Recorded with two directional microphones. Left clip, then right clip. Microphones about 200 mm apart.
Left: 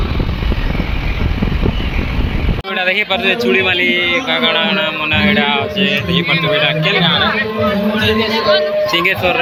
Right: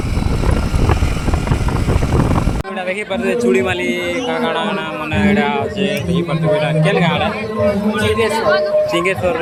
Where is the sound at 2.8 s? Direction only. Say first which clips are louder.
Left 7 dB; 5° right (ahead or behind).